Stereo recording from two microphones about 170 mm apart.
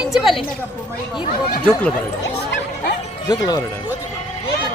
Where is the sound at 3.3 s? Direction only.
20° left (ahead or behind).